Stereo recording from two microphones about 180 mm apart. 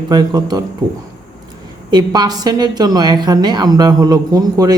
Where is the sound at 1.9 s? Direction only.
20° right (ahead or behind).